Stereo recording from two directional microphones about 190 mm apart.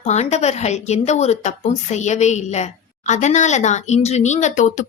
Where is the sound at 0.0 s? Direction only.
35° left (ahead or behind).